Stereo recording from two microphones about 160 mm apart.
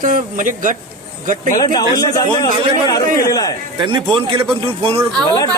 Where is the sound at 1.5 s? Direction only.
25° left (ahead or behind).